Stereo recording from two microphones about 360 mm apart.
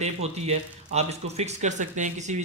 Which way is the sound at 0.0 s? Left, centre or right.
Centre.